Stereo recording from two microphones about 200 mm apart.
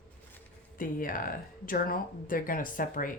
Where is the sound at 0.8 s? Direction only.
45° left (ahead or behind).